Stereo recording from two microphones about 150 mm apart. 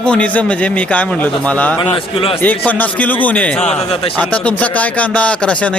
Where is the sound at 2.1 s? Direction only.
40° left (ahead or behind).